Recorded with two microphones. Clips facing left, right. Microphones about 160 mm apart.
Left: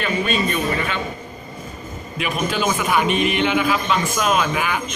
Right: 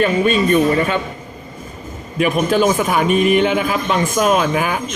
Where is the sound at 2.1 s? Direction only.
45° right (ahead or behind).